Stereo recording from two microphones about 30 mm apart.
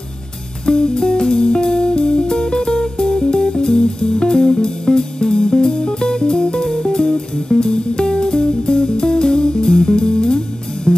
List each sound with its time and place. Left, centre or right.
0.7 s music: left